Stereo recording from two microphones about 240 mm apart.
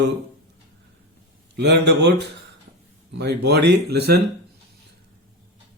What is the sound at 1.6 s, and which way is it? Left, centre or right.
Speech, right.